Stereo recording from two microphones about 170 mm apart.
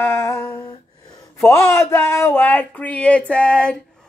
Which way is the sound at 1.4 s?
15° left (ahead or behind).